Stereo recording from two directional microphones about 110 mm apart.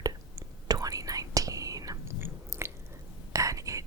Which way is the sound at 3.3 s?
30° right (ahead or behind).